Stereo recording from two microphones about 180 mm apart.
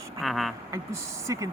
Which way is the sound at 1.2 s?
20° right (ahead or behind).